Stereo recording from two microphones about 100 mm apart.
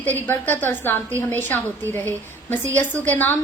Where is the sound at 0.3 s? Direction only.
20° left (ahead or behind).